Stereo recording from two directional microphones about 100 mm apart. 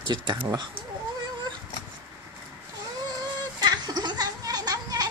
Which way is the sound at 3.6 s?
45° right (ahead or behind).